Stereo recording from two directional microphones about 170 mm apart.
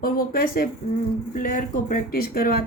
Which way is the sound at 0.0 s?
60° left (ahead or behind).